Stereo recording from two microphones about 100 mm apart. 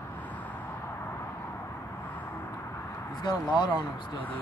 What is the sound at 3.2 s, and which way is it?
Speech, 45° left (ahead or behind).